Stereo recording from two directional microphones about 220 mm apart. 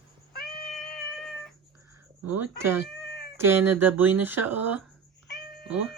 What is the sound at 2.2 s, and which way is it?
Speech, 10° right (ahead or behind).